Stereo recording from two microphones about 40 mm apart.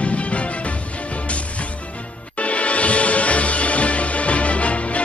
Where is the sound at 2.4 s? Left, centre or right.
Left.